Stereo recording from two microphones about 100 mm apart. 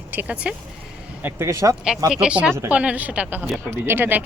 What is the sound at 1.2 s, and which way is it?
Speech, 25° right (ahead or behind).